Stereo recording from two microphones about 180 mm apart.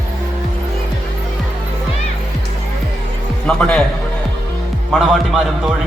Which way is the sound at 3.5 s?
5° left (ahead or behind).